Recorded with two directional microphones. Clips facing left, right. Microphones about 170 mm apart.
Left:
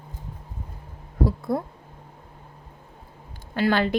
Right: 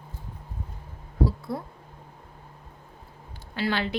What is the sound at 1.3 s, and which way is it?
Speech, 50° left (ahead or behind).